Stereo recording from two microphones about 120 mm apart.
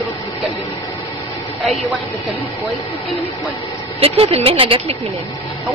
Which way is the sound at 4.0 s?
55° right (ahead or behind).